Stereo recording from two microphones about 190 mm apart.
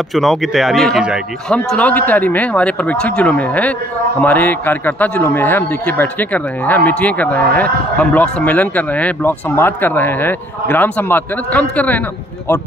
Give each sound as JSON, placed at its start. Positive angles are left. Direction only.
{"t": 0.1, "sound": "speech", "side_deg": 0}